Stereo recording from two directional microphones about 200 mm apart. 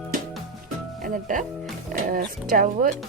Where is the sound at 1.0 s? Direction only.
40° right (ahead or behind).